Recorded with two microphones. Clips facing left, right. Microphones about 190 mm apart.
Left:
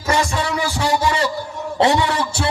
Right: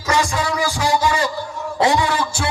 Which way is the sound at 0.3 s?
30° left (ahead or behind).